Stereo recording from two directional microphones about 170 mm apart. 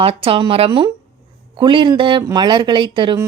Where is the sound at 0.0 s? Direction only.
35° right (ahead or behind).